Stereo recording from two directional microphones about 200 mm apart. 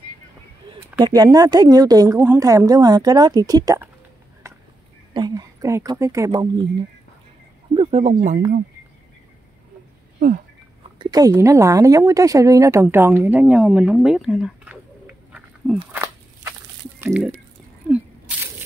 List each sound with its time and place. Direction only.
0.9 s speech: 20° right (ahead or behind)
5.1 s speech: 20° right (ahead or behind)
7.7 s speech: 30° right (ahead or behind)
11.0 s a woman's voice: 20° right (ahead or behind)
17.9 s a sound: 5° right (ahead or behind)